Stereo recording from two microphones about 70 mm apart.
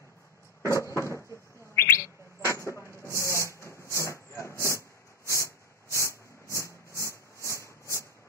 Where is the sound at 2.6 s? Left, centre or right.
Left.